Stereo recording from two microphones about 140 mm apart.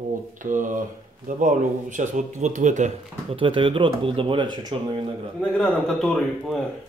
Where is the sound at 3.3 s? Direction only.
40° right (ahead or behind).